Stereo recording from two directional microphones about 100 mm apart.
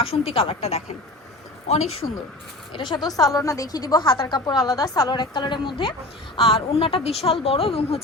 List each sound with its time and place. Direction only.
0.0 s speech: 70° left (ahead or behind)
1.6 s speech: 90° left
2.7 s a woman's voice: 45° left (ahead or behind)
4.0 s a woman's voice: 60° left (ahead or behind)
4.4 s a woman's voice: 40° left (ahead or behind)
6.3 s speech: 70° left (ahead or behind); by 8.0 s 85° left